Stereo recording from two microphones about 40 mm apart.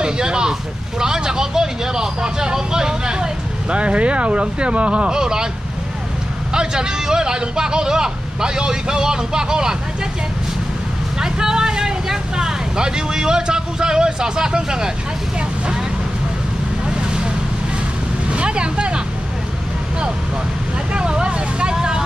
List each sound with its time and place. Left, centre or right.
0.0 s speech: right
3.7 s speech: right
6.5 s speech: centre
11.1 s speech: centre
17.0 s vehicle: right
18.3 s vehicle: right
20.9 s speech: right